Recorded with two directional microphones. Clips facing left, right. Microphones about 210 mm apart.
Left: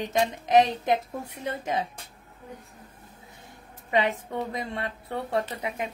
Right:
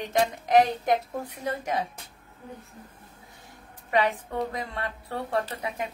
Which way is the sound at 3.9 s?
20° left (ahead or behind).